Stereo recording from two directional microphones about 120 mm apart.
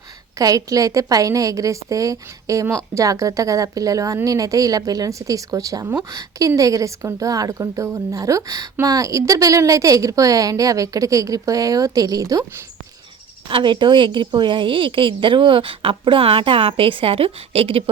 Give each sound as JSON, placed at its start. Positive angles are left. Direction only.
{"t": 0.3, "sound": "a woman's voice", "side_deg": -30}
{"t": 13.5, "sound": "a woman's voice", "side_deg": -40}